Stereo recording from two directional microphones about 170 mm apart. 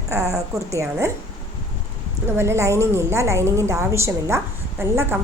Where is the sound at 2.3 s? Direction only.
15° right (ahead or behind).